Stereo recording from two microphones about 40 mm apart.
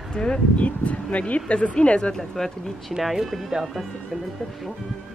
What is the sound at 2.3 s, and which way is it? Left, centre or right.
Speech, centre.